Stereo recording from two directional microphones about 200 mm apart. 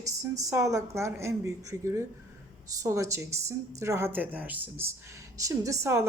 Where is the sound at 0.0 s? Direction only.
15° right (ahead or behind).